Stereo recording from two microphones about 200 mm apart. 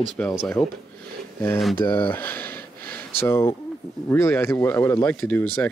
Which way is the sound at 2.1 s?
10° left (ahead or behind).